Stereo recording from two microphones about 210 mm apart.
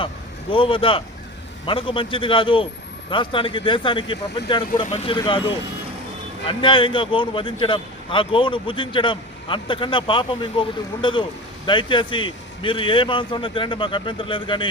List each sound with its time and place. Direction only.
0.5 s speech: 25° left (ahead or behind)
6.4 s speech: 25° left (ahead or behind)